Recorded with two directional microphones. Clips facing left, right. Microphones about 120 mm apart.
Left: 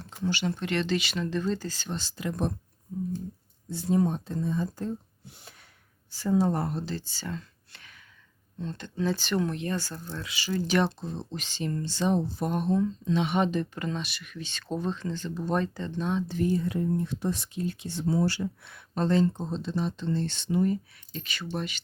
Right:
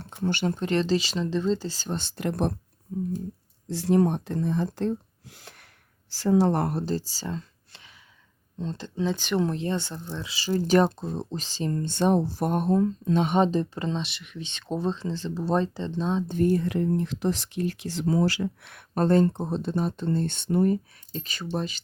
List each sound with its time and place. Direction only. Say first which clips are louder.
0.0 s a sound: right 3 dB; 55° right (ahead or behind)
0.6 s speech: right 6 dB; 35° right (ahead or behind)
2.0 s speech: right 4 dB; 55° right (ahead or behind)
3.7 s speech: right 4 dB; 80° right; by 6.9 s 60° right (ahead or behind)
7.1 s a sound: right 3 dB; 35° right (ahead or behind)
8.5 s speech: right 3 dB; 30° right (ahead or behind)
9.0 s speech: right 1 dB; 15° right (ahead or behind)
9.4 s speech: right 3 dB; 30° right (ahead or behind)
10.4 s speech: right 5 dB; 35° right (ahead or behind)
11.9 s speech: right 4 dB; 55° right (ahead or behind)
12.5 s speech: right 3 dB; 45° right (ahead or behind); by 16.2 s 25° right (ahead or behind)
16.3 s speech: right 4 dB; 55° right (ahead or behind); by 18.9 s 75° right (ahead or behind)
18.9 s speech: right 4 dB; 50° right (ahead or behind)
21.1 s speech: right 3 dB; 35° right (ahead or behind)